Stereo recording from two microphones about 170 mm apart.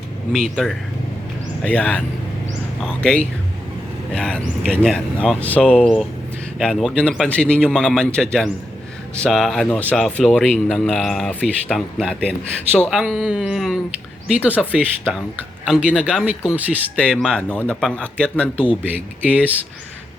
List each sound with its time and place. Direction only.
0.3 s speech: 5° left (ahead or behind)
15.6 s speech: 5° right (ahead or behind)
17.0 s speech: 5° left (ahead or behind)
19.2 s speech: 10° right (ahead or behind)